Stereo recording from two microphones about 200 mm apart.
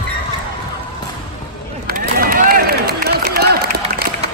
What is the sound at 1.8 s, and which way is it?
Run, 45° right (ahead or behind).